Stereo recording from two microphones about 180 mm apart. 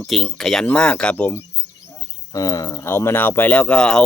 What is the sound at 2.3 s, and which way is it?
Speech, 20° left (ahead or behind).